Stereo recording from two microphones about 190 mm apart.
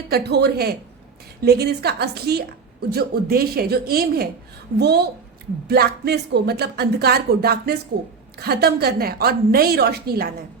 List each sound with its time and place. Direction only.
0.1 s speech: 60° right (ahead or behind)